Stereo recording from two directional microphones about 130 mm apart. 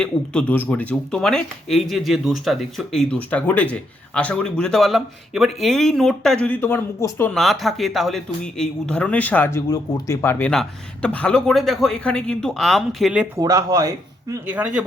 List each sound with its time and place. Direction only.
0.0 s speech: 10° left (ahead or behind)
7.3 s speech: centre (ahead or behind); by 10.5 s 15° left (ahead or behind)
10.5 s speech: 5° left (ahead or behind)
13.3 s speech: 30° right (ahead or behind)
14.4 s speech: 10° right (ahead or behind)